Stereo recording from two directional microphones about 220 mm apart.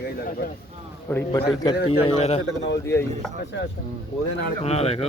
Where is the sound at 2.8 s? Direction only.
10° left (ahead or behind).